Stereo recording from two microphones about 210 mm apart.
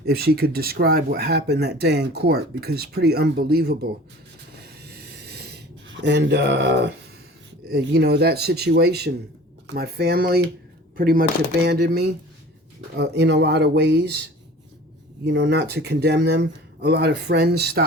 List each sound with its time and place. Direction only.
0.0 s speech: 50° right (ahead or behind)
4.6 s a sound: 50° right (ahead or behind)
7.7 s speech: 50° right (ahead or behind)
15.2 s speech: 55° right (ahead or behind)